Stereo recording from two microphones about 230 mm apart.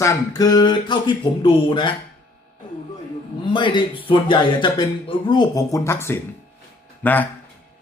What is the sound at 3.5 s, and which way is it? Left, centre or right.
Speech, left.